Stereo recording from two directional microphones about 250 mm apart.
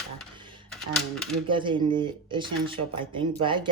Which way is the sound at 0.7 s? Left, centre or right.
Centre.